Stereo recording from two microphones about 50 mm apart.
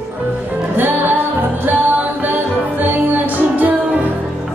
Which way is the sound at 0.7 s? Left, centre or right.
Right.